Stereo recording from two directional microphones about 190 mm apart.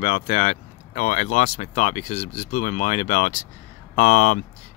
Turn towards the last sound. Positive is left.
turn(degrees=40)  # may be behind; listen again after turning